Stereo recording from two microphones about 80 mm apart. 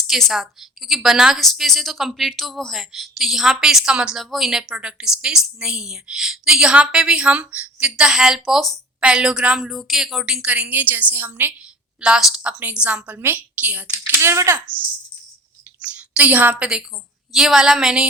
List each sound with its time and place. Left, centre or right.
0.1 s a woman's voice: centre
9.0 s a woman's voice: centre
9.6 s a woman's voice: centre; by 11.5 s right
11.9 s a woman's voice: centre
14.2 s speech: right
15.8 s a woman's voice: centre